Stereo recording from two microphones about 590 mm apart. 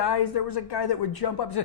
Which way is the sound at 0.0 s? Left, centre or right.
Left.